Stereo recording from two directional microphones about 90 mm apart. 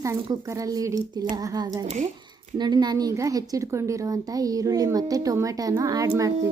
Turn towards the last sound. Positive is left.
turn(degrees=-35)  # may be behind; listen again after turning